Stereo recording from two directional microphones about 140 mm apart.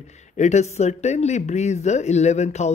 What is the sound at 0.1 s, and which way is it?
Speech, 55° left (ahead or behind).